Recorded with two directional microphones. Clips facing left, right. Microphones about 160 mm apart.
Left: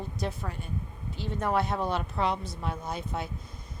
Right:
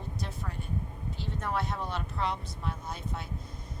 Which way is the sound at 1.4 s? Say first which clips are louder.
Left 6 dB; 75° left (ahead or behind).